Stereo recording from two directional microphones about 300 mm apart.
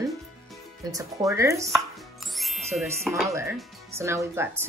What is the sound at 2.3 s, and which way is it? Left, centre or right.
Music, centre.